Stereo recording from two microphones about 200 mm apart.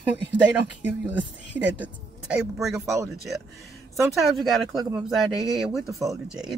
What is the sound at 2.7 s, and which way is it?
Speech, 15° right (ahead or behind).